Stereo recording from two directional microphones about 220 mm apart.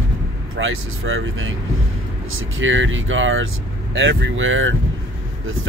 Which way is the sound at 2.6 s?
60° right (ahead or behind).